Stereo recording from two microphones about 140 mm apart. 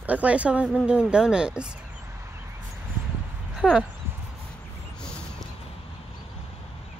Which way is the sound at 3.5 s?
5° right (ahead or behind).